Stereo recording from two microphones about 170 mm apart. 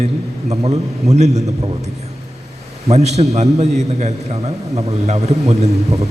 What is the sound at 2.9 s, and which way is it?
A man's voice, 40° right (ahead or behind).